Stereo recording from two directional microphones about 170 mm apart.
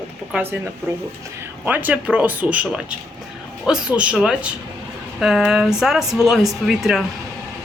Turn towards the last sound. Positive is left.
turn(degrees=0)  # may be behind; listen again after turning